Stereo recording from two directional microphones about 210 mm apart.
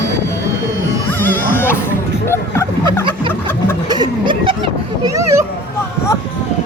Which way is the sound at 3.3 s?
10° left (ahead or behind).